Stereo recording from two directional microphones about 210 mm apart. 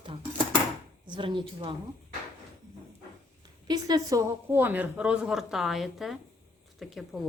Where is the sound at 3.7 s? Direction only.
20° right (ahead or behind).